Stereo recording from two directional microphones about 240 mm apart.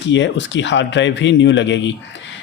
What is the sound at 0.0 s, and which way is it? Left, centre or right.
Speech, left.